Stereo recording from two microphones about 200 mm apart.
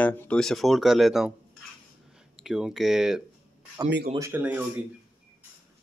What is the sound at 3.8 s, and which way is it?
Speech, 60° right (ahead or behind).